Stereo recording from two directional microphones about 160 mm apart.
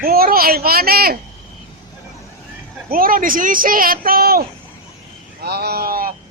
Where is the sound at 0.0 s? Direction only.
70° right (ahead or behind).